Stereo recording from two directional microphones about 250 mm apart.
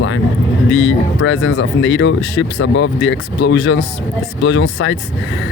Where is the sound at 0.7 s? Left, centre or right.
Left.